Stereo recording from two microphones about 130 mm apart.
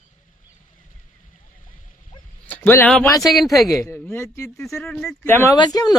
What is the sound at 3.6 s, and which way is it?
Speech, 25° left (ahead or behind).